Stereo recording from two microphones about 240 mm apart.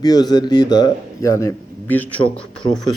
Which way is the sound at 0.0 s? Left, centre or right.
Centre.